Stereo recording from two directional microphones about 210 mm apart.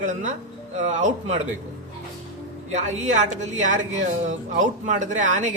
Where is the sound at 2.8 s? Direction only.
35° right (ahead or behind).